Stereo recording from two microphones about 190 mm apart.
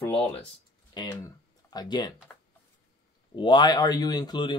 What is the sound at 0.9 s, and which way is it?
Speech, 20° left (ahead or behind).